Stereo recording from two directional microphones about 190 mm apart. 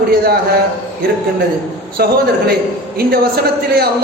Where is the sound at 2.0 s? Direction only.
50° right (ahead or behind).